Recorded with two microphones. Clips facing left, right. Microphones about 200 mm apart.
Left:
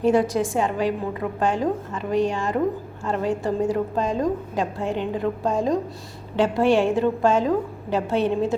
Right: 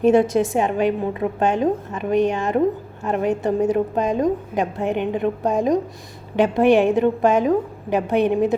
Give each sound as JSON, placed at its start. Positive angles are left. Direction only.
{"t": 0.0, "sound": "a woman's voice", "side_deg": -20}